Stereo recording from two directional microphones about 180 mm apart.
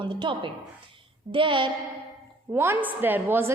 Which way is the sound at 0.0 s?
25° right (ahead or behind).